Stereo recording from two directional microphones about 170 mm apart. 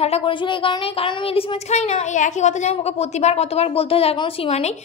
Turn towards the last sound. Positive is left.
turn(degrees=40)  # may be behind; listen again after turning